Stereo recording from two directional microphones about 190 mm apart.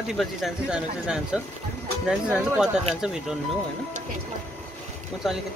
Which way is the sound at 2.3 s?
5° right (ahead or behind).